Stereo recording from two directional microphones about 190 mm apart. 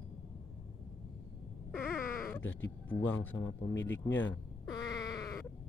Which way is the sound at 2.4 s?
90° left.